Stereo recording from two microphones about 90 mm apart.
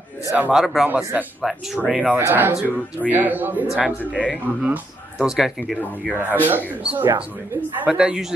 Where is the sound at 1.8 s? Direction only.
15° right (ahead or behind).